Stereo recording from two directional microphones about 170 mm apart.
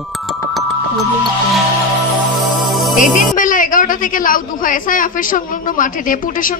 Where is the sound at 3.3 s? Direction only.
50° left (ahead or behind).